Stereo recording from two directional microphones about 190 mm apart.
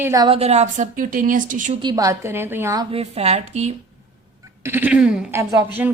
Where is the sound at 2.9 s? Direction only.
35° right (ahead or behind).